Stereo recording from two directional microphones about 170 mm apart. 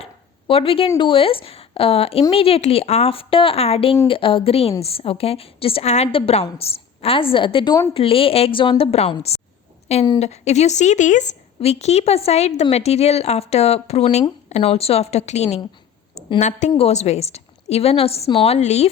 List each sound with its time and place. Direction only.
0.0 s a woman's voice: 35° left (ahead or behind)